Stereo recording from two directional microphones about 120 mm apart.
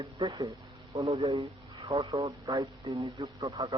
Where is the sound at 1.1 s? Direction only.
50° right (ahead or behind).